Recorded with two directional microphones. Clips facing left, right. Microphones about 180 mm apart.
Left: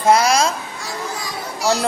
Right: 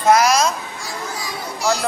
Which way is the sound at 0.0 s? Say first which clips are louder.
Even; 30° left (ahead or behind).